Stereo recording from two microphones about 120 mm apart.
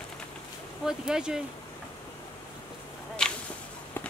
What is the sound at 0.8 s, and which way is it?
Speech, 5° right (ahead or behind).